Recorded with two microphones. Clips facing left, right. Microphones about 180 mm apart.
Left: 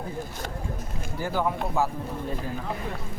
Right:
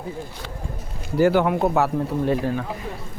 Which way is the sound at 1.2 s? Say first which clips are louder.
Right 10 dB; 75° right (ahead or behind).